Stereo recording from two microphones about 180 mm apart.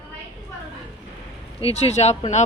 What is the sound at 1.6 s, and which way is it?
Speech, 35° left (ahead or behind).